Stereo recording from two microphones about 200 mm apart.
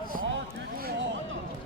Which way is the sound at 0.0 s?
45° right (ahead or behind).